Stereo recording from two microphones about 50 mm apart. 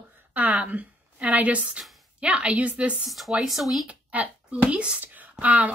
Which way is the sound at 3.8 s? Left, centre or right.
Right.